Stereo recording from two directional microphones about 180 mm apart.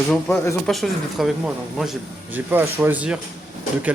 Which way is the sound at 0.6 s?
Centre (ahead or behind).